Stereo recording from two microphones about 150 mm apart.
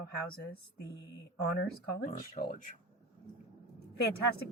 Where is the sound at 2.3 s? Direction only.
60° left (ahead or behind).